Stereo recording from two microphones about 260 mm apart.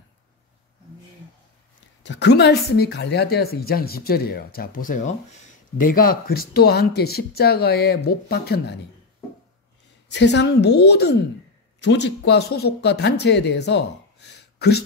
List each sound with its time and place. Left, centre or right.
2.0 s speech: left
10.0 s speech: left